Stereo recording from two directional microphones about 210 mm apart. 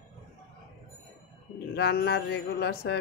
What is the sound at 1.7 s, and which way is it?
Mantra, 50° left (ahead or behind).